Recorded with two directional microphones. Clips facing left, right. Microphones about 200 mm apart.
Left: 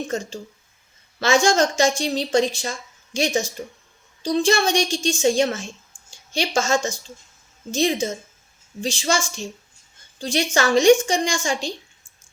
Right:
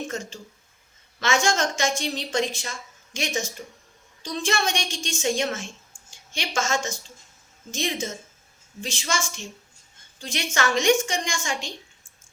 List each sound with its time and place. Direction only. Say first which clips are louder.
1.2 s a woman's voice: left 6 dB; 35° left (ahead or behind)